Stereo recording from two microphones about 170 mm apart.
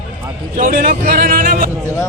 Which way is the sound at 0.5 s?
55° right (ahead or behind).